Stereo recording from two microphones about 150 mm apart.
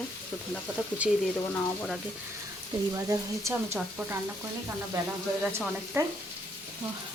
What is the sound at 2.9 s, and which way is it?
Speech, 20° right (ahead or behind).